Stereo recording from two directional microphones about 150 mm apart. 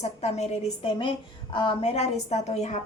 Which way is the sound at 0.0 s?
45° left (ahead or behind).